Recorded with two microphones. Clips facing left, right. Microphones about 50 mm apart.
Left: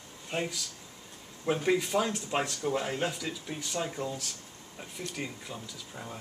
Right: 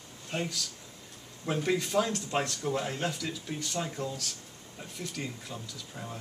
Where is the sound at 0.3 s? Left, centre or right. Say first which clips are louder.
Left 1 dB; centre.